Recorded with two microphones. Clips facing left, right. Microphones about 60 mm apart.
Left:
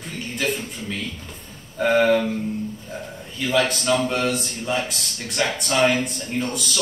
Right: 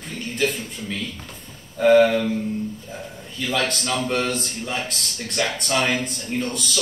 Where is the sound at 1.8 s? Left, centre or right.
Centre.